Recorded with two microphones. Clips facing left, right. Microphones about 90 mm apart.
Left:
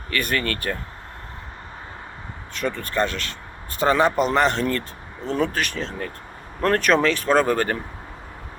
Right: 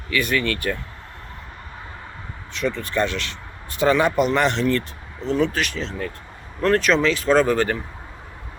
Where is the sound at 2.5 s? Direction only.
45° left (ahead or behind).